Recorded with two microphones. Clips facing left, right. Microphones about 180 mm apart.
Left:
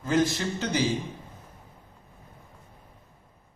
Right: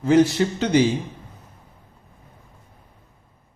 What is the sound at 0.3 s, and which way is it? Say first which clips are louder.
Speech: right 9 dB; 65° right (ahead or behind).